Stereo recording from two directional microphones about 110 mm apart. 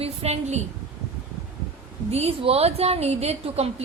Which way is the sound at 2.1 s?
65° right (ahead or behind).